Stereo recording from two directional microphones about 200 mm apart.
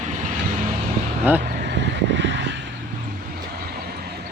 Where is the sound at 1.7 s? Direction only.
60° right (ahead or behind).